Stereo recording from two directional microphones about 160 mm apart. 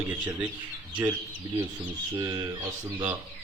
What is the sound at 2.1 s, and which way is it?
Speech, 25° right (ahead or behind).